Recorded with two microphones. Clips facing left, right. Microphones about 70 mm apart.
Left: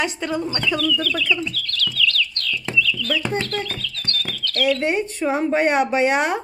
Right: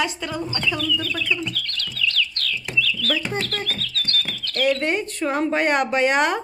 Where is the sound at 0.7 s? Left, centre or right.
Centre.